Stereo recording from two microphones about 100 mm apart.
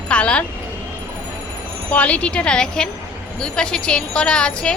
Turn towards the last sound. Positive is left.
turn(degrees=10)  # may be behind; listen again after turning